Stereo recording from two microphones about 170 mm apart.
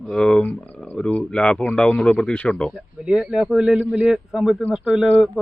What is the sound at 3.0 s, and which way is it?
Speech, 5° right (ahead or behind).